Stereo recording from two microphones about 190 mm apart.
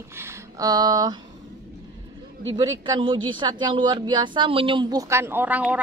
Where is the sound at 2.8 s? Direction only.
25° right (ahead or behind).